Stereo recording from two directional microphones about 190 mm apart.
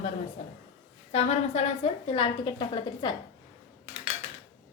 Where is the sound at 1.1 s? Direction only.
35° left (ahead or behind).